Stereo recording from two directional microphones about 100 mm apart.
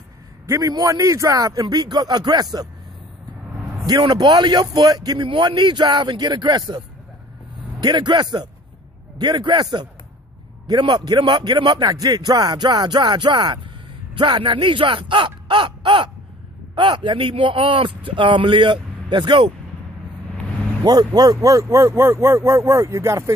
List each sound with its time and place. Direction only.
0.5 s speech: 35° right (ahead or behind)
3.8 s a man's voice: 45° right (ahead or behind)
7.8 s a man's voice: 45° right (ahead or behind)
20.8 s speech: 40° right (ahead or behind)